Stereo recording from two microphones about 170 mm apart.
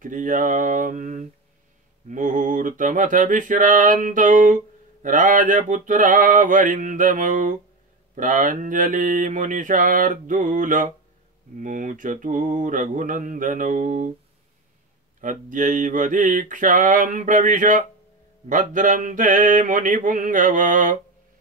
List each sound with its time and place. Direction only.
0.0 s mantra: 50° right (ahead or behind)
15.1 s mantra: 50° right (ahead or behind)